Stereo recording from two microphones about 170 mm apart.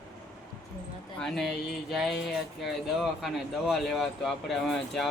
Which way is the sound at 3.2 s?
Centre (ahead or behind).